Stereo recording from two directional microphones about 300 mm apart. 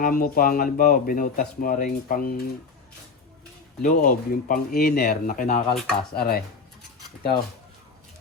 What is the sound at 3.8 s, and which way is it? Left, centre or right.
Speech, left.